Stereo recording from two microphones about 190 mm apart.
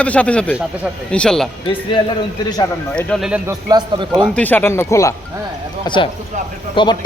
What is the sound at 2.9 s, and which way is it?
Speech, 5° left (ahead or behind).